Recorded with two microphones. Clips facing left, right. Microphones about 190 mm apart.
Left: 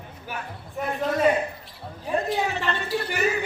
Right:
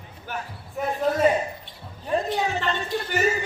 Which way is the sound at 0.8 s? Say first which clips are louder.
Right 2 dB; centre (ahead or behind).